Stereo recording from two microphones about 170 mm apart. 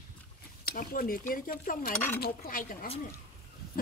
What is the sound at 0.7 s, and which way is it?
Speech, 55° left (ahead or behind).